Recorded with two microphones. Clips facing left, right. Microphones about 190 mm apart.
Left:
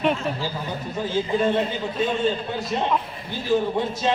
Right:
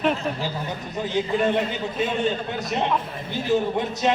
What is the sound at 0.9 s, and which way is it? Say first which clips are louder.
Speech: even; 20° right (ahead or behind).